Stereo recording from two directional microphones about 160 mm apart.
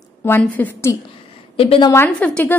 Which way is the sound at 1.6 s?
35° left (ahead or behind).